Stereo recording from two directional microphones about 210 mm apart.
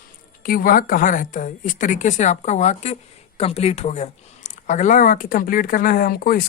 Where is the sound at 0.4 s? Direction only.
40° left (ahead or behind).